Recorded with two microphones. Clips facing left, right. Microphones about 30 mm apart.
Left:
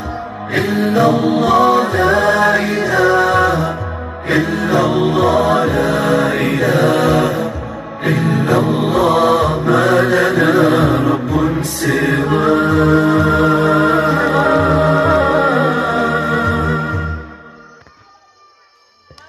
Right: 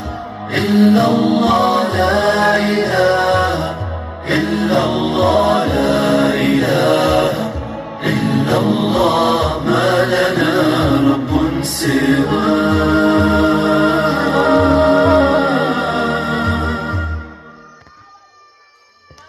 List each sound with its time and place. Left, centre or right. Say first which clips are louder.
0.5 s music: right 4 dB; right